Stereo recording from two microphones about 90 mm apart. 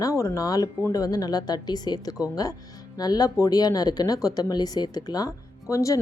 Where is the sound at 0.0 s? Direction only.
35° left (ahead or behind).